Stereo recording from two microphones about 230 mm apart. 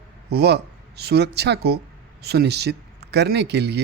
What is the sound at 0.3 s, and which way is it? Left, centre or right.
Speech, right.